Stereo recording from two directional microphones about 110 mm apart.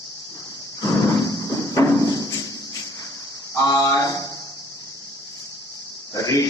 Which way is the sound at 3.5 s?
35° left (ahead or behind).